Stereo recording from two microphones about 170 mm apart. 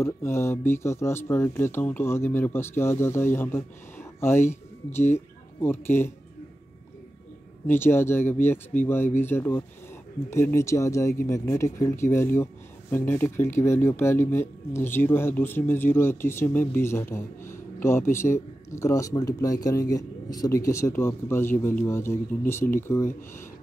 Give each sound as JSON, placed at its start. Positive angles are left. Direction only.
{"t": 0.0, "sound": "a man's voice", "side_deg": 15}
{"t": 7.6, "sound": "a man's voice", "side_deg": 15}